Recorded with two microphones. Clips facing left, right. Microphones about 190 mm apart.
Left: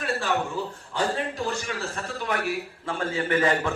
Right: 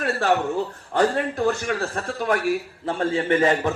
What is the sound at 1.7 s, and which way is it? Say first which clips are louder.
Speech: right 7 dB; 55° right (ahead or behind).